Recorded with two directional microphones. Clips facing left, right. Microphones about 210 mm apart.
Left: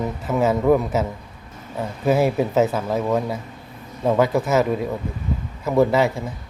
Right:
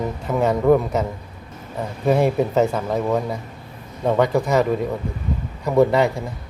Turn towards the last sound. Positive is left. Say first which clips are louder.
# right 1 dB
turn(degrees=0)  # may be behind; listen again after turning